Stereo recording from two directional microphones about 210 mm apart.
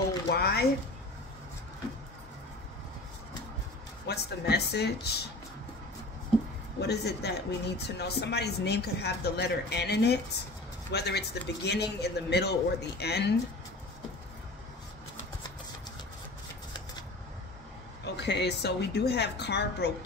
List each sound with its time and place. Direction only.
0.3 s a sound: 50° left (ahead or behind)
4.1 s a woman's voice: 50° left (ahead or behind)
6.8 s a woman's voice: 50° left (ahead or behind)
18.0 s a woman's voice: 55° left (ahead or behind)